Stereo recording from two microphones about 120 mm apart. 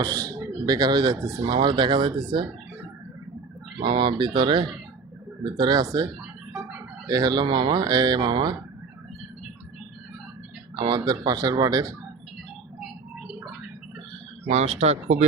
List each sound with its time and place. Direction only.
0.0 s speech: 30° right (ahead or behind)
3.8 s speech: 40° right (ahead or behind)
7.1 s speech: 35° right (ahead or behind)
10.8 s speech: 35° right (ahead or behind)
14.5 s speech: 65° right (ahead or behind)